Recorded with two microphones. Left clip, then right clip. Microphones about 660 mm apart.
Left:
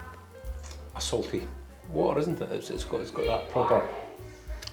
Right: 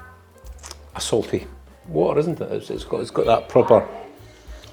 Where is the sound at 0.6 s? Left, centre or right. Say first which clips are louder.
Right 6 dB; right.